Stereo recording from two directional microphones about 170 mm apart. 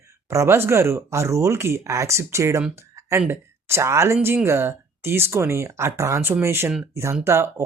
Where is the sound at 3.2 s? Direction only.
15° right (ahead or behind).